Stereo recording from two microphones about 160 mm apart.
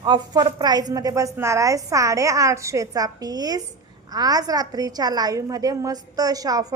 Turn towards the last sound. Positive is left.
turn(degrees=-20)  # may be behind; listen again after turning